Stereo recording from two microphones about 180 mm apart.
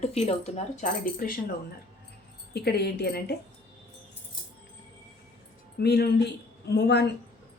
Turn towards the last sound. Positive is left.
turn(degrees=65)  # may be behind; listen again after turning